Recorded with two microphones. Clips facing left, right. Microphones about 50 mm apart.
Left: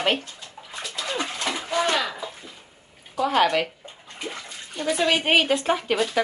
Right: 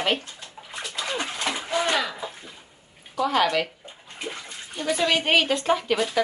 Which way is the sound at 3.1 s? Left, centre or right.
Centre.